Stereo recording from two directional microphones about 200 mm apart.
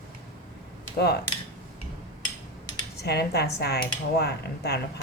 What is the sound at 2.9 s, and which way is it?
Speech, 55° left (ahead or behind).